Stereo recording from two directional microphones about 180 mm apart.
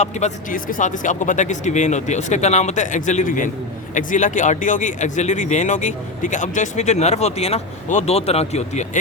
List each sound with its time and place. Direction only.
0.0 s speech: 40° left (ahead or behind)